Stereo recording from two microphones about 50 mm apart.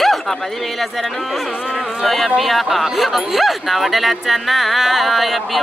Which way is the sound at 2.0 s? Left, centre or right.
Centre.